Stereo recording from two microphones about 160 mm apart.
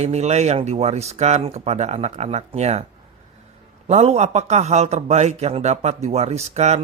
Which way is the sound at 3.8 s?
45° right (ahead or behind).